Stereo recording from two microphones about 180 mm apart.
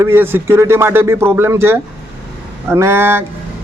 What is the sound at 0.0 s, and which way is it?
Speech, 15° right (ahead or behind).